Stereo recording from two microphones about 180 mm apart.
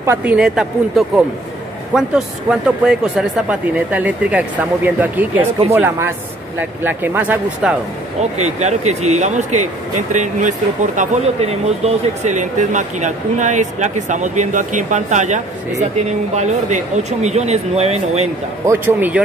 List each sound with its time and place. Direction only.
0.0 s a man's voice: 10° right (ahead or behind)
8.4 s speech: 40° right (ahead or behind)
18.7 s speech: 10° right (ahead or behind)